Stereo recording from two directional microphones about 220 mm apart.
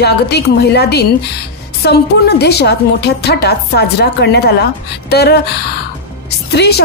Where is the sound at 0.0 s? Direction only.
50° left (ahead or behind).